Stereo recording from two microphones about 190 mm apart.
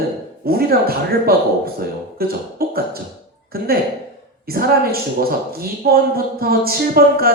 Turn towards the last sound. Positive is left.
turn(degrees=-55)  # may be behind; listen again after turning